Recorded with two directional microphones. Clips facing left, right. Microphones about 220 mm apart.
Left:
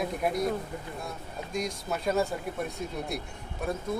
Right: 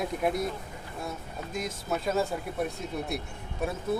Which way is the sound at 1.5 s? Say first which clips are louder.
Even; centre (ahead or behind).